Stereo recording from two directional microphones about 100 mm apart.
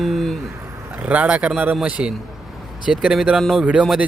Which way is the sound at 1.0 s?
15° right (ahead or behind).